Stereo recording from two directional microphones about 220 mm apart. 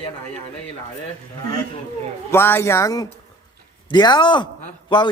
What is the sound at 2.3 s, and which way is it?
A man's voice, 10° left (ahead or behind).